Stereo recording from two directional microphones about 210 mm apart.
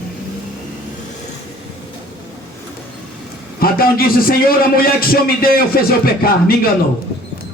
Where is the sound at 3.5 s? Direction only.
45° left (ahead or behind).